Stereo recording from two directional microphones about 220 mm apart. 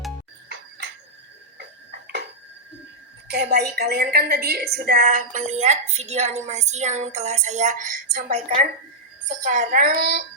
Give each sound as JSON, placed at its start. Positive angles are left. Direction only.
{"t": 1.5, "sound": "tick-tock", "side_deg": -50}
{"t": 3.2, "sound": "a woman's voice", "side_deg": -50}
{"t": 8.4, "sound": "a woman's voice", "side_deg": -25}